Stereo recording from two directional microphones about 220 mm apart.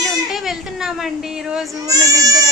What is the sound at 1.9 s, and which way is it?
Speech, 15° right (ahead or behind).